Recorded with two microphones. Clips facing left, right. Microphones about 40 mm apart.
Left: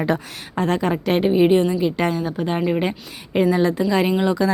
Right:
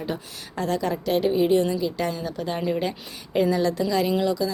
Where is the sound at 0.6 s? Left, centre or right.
Left.